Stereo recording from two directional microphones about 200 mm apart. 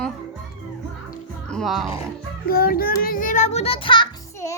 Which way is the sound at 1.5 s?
Centre (ahead or behind).